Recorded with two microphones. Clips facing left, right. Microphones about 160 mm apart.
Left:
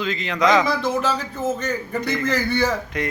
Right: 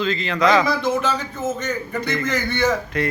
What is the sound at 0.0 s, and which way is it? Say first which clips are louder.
Speech: right 1 dB; 15° left (ahead or behind).